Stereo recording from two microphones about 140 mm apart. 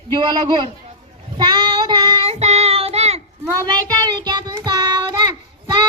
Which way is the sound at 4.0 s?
30° right (ahead or behind).